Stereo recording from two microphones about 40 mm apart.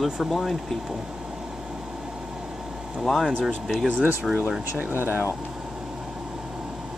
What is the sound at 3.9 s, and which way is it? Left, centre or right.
Speech, right.